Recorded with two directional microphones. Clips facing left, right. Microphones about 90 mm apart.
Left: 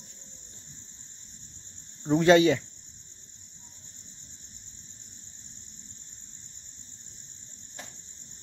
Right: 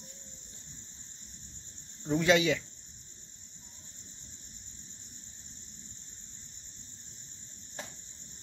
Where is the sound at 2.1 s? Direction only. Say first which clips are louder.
Left 7 dB; 40° left (ahead or behind).